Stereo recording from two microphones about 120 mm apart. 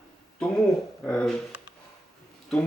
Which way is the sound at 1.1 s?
10° left (ahead or behind).